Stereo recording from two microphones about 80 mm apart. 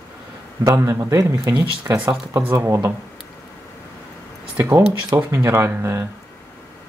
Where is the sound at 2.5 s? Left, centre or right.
Right.